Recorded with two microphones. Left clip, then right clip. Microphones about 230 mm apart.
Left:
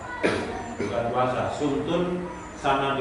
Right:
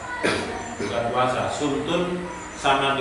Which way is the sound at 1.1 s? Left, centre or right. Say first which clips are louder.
Right 3 dB; centre.